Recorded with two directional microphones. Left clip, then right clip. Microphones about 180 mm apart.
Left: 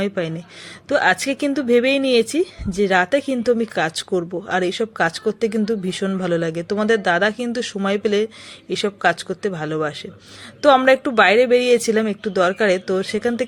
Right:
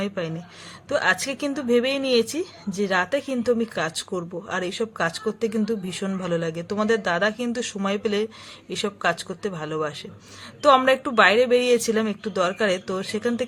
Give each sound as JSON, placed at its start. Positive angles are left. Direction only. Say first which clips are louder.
{"t": 0.0, "sound": "speech", "louder": "left 5 dB", "side_deg": 20}